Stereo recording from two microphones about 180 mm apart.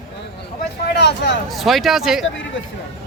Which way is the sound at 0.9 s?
70° left (ahead or behind).